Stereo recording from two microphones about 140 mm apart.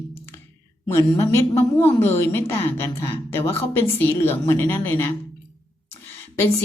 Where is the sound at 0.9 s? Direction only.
20° left (ahead or behind).